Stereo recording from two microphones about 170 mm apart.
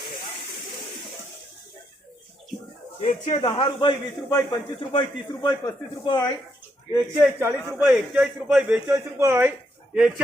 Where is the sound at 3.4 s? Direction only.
30° left (ahead or behind).